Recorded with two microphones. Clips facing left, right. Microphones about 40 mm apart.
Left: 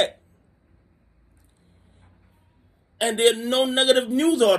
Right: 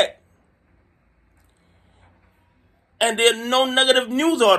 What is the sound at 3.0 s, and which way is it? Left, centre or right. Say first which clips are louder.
Speech: right 2 dB; right.